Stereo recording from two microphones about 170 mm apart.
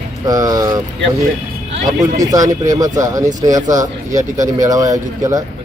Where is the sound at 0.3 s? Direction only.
20° right (ahead or behind).